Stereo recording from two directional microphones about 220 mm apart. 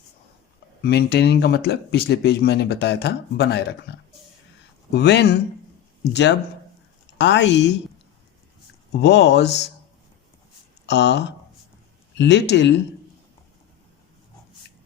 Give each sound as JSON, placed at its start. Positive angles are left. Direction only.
{"t": 0.8, "sound": "speech", "side_deg": 45}
{"t": 4.9, "sound": "speech", "side_deg": 50}
{"t": 9.0, "sound": "speech", "side_deg": 50}
{"t": 10.8, "sound": "speech", "side_deg": 50}